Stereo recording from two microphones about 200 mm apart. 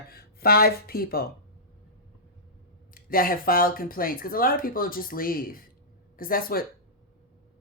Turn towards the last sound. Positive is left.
turn(degrees=45)  # may be behind; listen again after turning